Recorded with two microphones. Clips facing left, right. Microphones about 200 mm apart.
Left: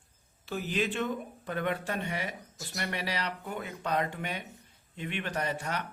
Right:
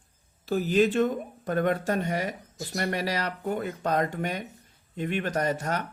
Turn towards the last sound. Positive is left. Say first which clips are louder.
# right 6 dB
turn(degrees=-40)  # may be behind; listen again after turning